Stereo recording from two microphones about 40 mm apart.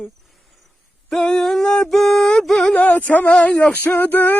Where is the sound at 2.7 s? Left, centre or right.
Left.